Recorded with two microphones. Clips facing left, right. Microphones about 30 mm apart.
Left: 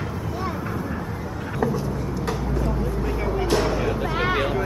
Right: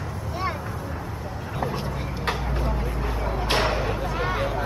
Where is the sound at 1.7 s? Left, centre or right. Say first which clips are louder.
Left 4 dB; right.